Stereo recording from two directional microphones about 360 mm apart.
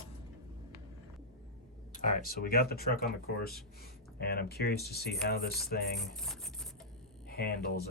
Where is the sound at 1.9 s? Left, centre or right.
Left.